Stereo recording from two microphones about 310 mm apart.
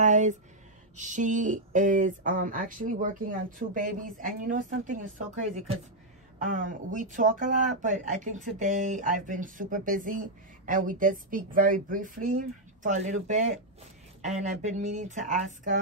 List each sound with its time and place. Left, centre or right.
0.0 s speech: right